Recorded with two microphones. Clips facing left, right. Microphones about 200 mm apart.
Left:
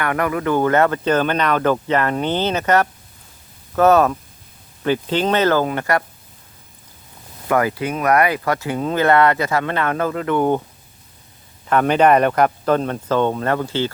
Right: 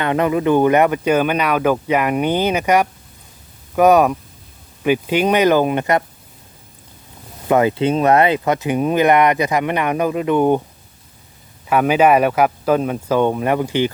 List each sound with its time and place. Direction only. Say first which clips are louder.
0.0 s speech: right 4 dB; 20° right (ahead or behind)
7.4 s speech: right 4 dB; 20° right (ahead or behind)
11.7 s speech: right 1 dB; 5° right (ahead or behind)